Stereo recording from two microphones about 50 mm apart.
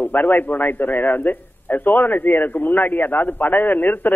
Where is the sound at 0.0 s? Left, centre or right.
Left.